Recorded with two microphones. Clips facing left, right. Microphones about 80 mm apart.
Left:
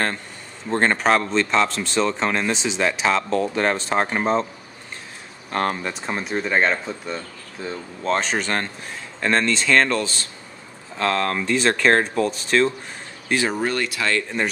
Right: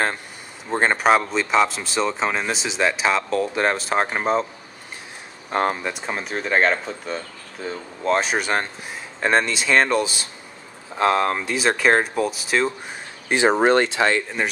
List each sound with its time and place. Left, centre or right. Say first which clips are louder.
0.7 s speech: right 1 dB; centre
5.5 s speech: right 1 dB; centre
13.3 s speech: right 4 dB; right
13.6 s speech: right 7 dB; right